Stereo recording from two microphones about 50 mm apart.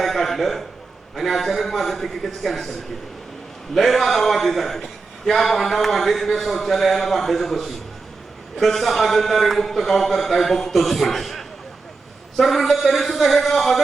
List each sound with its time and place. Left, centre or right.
0.0 s a sound: centre
1.1 s a man's voice: centre
3.8 s a man's voice: centre